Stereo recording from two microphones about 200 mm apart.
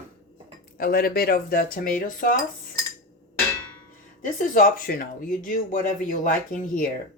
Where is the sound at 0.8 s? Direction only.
45° left (ahead or behind).